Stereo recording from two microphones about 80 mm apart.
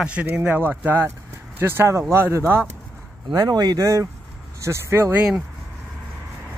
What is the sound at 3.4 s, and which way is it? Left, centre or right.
Speech, right.